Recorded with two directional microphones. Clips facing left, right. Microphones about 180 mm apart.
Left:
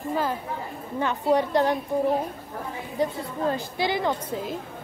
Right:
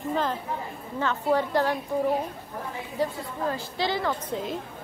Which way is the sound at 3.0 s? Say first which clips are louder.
Left 2 dB; 20° left (ahead or behind).